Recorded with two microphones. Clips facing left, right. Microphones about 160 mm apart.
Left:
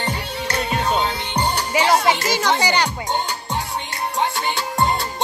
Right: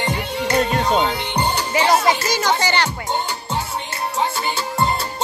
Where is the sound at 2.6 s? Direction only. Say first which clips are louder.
Even; 15° left (ahead or behind).